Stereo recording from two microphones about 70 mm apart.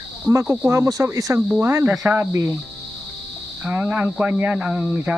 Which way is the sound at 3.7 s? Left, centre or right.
Right.